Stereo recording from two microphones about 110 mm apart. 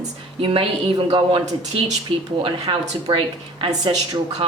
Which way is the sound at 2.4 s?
65° right (ahead or behind).